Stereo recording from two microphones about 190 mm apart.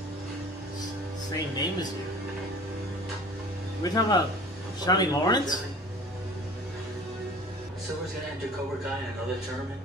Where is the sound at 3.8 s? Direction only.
20° left (ahead or behind).